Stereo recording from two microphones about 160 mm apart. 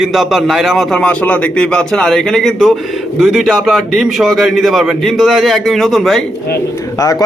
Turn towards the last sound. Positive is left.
turn(degrees=20)  # may be behind; listen again after turning